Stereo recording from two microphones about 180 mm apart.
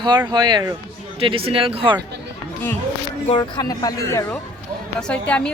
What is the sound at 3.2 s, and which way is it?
Speech, 25° left (ahead or behind).